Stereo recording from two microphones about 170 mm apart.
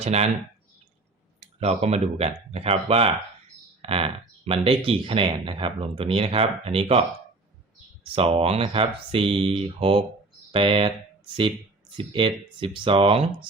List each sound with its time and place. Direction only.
0.0 s speech: 40° right (ahead or behind)
1.5 s speech: 40° right (ahead or behind)
8.1 s speech: 35° right (ahead or behind)
10.5 s speech: 30° right (ahead or behind)